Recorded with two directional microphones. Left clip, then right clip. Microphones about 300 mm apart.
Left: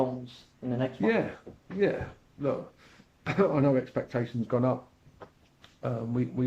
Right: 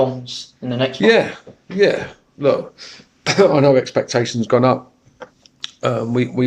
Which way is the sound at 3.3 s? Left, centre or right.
Right.